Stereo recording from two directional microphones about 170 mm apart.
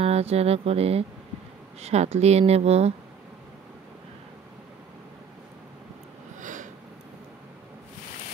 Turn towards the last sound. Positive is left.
turn(degrees=-50)  # may be behind; listen again after turning